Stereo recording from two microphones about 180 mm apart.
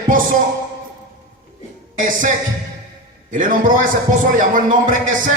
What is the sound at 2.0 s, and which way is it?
Speech, 45° right (ahead or behind).